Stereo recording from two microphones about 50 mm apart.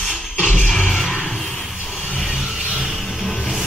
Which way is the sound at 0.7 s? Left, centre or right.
Centre.